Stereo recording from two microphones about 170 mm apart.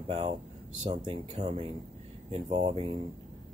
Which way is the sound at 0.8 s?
30° right (ahead or behind).